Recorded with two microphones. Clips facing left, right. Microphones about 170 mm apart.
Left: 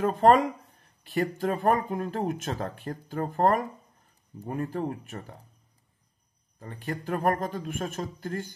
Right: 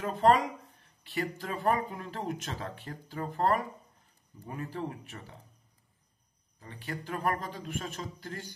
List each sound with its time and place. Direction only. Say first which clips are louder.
0.0 s speech: left 5 dB; 50° left (ahead or behind)
6.6 s speech: left 6 dB; 50° left (ahead or behind)